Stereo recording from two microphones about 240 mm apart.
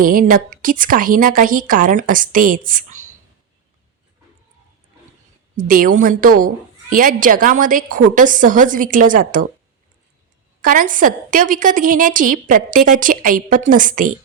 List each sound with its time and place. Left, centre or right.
0.0 s a woman's voice: right
5.5 s a woman's voice: right
10.6 s a woman's voice: right